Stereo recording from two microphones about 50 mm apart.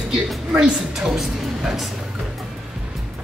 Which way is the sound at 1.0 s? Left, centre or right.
Centre.